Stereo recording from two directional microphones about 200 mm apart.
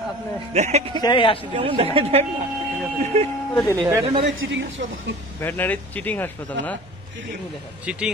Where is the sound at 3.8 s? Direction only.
20° right (ahead or behind).